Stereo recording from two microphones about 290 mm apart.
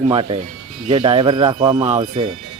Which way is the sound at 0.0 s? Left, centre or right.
Centre.